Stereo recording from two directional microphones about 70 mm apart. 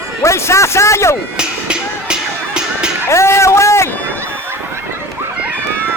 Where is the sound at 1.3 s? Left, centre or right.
Centre.